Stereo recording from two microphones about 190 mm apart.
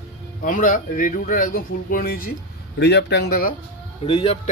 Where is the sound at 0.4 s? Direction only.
45° left (ahead or behind).